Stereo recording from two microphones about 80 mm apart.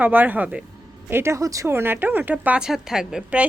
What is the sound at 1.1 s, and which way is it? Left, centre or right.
Speech, right.